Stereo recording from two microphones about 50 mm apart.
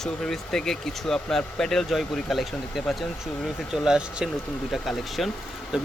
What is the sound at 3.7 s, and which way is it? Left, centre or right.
Speech, centre.